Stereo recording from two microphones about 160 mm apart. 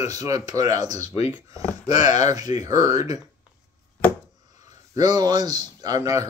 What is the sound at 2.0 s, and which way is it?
Speech, 50° left (ahead or behind).